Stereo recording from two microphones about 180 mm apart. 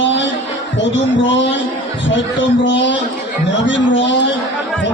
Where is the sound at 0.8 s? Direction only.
90° left.